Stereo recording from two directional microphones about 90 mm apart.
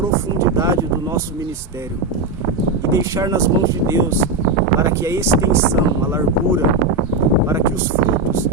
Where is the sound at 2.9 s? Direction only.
30° right (ahead or behind).